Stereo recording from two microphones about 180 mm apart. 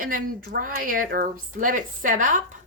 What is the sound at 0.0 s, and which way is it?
Speech, 50° right (ahead or behind).